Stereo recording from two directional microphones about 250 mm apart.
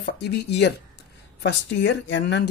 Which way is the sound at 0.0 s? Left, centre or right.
Left.